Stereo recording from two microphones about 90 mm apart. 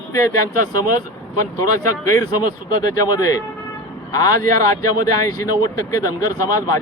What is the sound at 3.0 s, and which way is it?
A man's voice, 45° left (ahead or behind).